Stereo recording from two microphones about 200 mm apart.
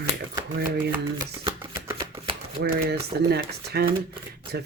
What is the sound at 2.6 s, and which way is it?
Speech, 55° right (ahead or behind).